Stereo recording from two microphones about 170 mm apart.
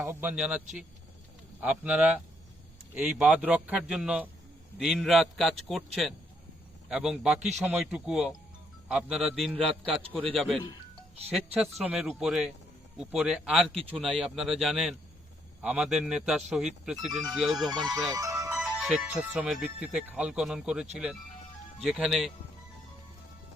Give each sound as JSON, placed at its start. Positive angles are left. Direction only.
{"t": 0.0, "sound": "speech", "side_deg": -10}
{"t": 1.6, "sound": "speech", "side_deg": -10}
{"t": 7.3, "sound": "speech", "side_deg": -40}
{"t": 7.6, "sound": "speech", "side_deg": -5}
{"t": 18.1, "sound": "music", "side_deg": -20}
{"t": 18.5, "sound": "speech", "side_deg": -5}